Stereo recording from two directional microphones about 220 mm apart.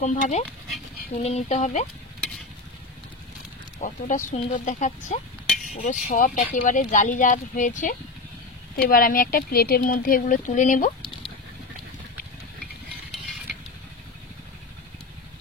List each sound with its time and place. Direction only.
0.0 s speech: 30° left (ahead or behind)
2.1 s stir: centre (ahead or behind)
3.8 s speech: 35° left (ahead or behind)
13.1 s a sound: centre (ahead or behind)